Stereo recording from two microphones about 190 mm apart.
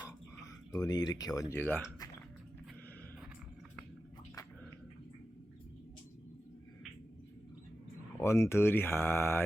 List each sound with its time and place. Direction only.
0.7 s speech: 20° left (ahead or behind)
8.2 s speech: 15° left (ahead or behind)